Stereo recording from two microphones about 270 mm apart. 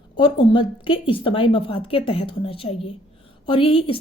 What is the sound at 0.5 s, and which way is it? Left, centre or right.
A woman's voice, centre.